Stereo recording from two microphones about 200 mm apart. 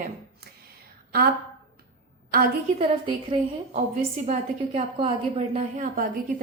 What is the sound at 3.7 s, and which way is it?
A woman's voice, 30° right (ahead or behind).